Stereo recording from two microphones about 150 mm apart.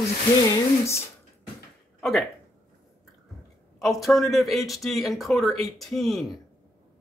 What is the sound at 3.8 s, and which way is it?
Speech, centre (ahead or behind).